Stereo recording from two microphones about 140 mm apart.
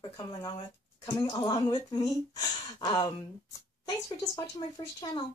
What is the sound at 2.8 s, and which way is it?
Speech, 30° left (ahead or behind).